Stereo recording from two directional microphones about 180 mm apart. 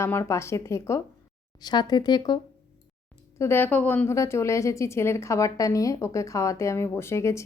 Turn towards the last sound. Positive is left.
turn(degrees=15)  # may be behind; listen again after turning